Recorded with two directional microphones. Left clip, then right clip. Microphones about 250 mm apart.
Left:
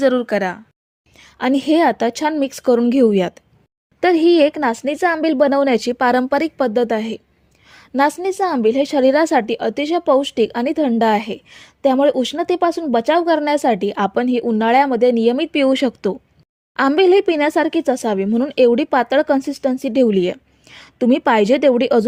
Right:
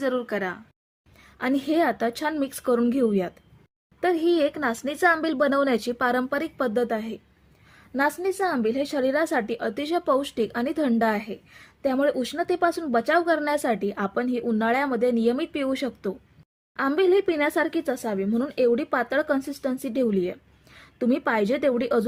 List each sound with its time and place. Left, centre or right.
0.0 s a woman's voice: left